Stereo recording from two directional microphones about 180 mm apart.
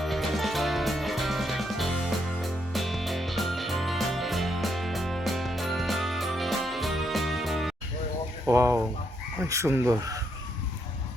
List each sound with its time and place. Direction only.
0.0 s music: centre (ahead or behind)
8.4 s speech: 15° right (ahead or behind)